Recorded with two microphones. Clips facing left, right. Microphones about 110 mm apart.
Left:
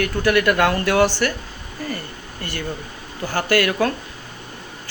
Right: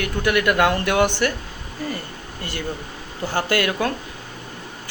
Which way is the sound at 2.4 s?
15° right (ahead or behind).